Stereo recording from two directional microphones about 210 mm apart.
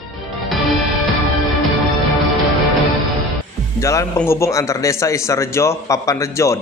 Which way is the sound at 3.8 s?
15° left (ahead or behind).